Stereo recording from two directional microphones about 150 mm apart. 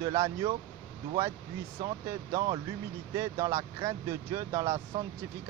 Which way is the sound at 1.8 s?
20° right (ahead or behind).